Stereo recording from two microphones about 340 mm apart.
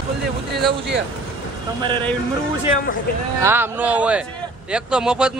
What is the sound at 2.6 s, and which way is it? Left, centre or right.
Speech, left.